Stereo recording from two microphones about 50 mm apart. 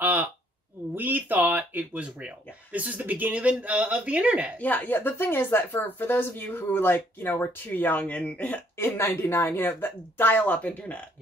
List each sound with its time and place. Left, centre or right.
0.0 s a sound: right
0.9 s speech: right
2.0 s a man's voice: right
4.6 s speech: left
8.7 s speech: left